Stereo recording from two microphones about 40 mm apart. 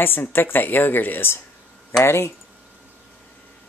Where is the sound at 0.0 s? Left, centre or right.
Left.